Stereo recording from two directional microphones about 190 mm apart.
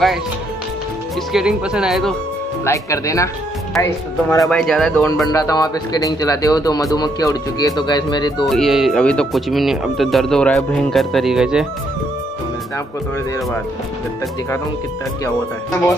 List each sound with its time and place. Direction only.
1.3 s speech: 5° right (ahead or behind)
2.6 s speech: 15° left (ahead or behind)
4.4 s speech: 5° left (ahead or behind)
5.3 s a man's voice: 20° left (ahead or behind)
8.5 s speech: centre (ahead or behind)